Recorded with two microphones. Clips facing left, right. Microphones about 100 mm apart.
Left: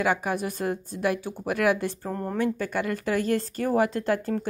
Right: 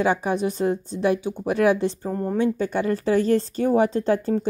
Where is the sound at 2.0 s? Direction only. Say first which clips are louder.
Right 5 dB; 5° right (ahead or behind).